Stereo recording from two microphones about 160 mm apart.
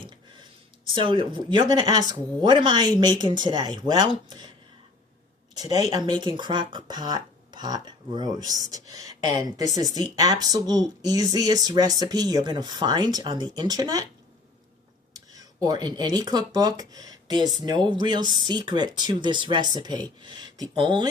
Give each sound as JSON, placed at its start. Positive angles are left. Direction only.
{"t": 0.9, "sound": "speech", "side_deg": -30}
{"t": 6.1, "sound": "speech", "side_deg": -30}
{"t": 15.1, "sound": "speech", "side_deg": -20}